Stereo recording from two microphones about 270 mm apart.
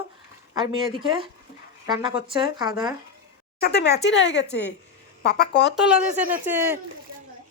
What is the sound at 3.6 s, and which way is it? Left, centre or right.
Speech, left.